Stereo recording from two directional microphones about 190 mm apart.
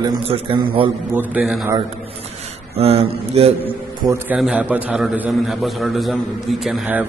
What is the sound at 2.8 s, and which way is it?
Mantra, 30° right (ahead or behind).